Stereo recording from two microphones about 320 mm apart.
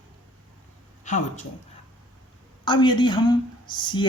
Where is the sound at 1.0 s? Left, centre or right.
Left.